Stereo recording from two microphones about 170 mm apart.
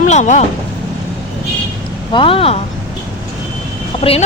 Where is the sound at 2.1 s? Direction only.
30° left (ahead or behind).